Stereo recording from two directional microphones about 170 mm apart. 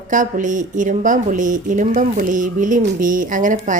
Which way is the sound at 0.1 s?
50° right (ahead or behind).